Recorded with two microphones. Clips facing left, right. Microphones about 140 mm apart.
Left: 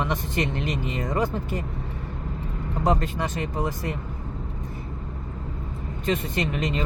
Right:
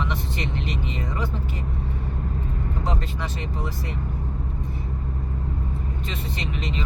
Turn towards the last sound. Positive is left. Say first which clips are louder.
# left 4 dB
turn(degrees=50)  # may be behind; listen again after turning